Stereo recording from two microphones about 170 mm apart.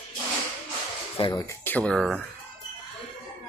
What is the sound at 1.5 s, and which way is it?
Speech, 10° left (ahead or behind).